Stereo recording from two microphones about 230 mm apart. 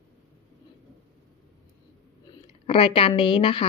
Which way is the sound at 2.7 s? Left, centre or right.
Left.